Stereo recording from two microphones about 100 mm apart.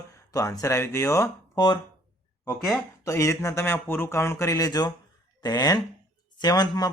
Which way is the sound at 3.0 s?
30° left (ahead or behind).